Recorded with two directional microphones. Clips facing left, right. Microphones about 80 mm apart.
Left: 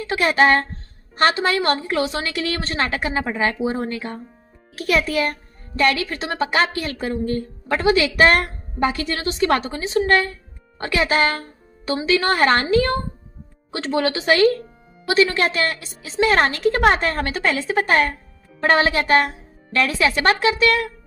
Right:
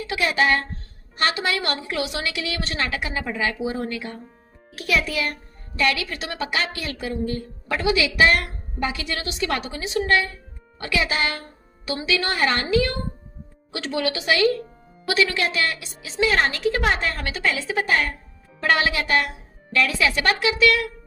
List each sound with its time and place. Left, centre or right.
0.0 s a child's voice: left
15.4 s a woman's voice: left
18.6 s a child's voice: left